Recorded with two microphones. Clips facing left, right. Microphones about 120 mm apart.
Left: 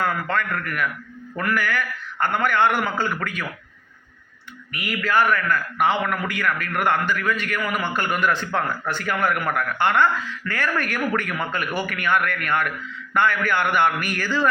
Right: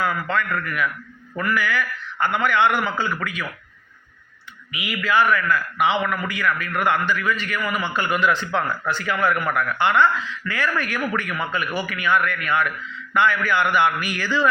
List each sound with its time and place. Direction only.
0.0 s speech: 50° left (ahead or behind)
4.8 s speech: 45° left (ahead or behind)